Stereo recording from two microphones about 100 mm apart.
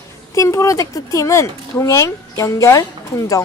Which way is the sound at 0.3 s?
30° left (ahead or behind).